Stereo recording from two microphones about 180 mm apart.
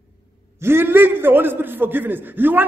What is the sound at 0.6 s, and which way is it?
A man's voice, 15° right (ahead or behind).